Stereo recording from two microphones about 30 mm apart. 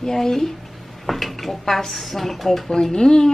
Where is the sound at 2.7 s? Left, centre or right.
Left.